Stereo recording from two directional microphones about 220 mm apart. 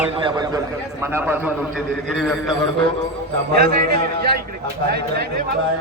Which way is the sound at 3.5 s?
45° right (ahead or behind).